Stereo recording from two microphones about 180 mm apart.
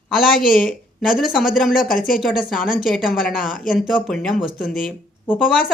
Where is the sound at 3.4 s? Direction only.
50° left (ahead or behind).